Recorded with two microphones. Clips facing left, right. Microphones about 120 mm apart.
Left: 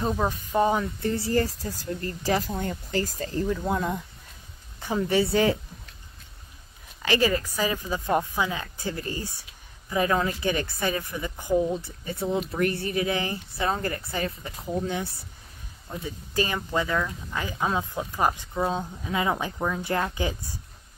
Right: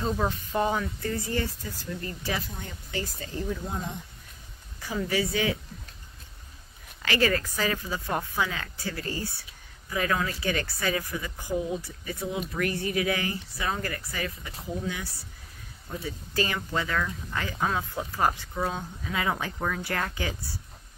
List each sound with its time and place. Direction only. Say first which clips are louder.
0.0 s speech: left 2 dB; 15° left (ahead or behind); by 3.3 s 40° left (ahead or behind)
3.4 s speech: left 7 dB; 70° left (ahead or behind)
5.0 s speech: left 5 dB; 30° left (ahead or behind)
7.0 s speech: left 2 dB; 15° left (ahead or behind)
16.0 s speech: left 2 dB; 15° left (ahead or behind)